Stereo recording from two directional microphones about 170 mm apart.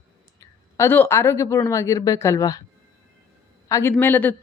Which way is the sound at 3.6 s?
15° left (ahead or behind).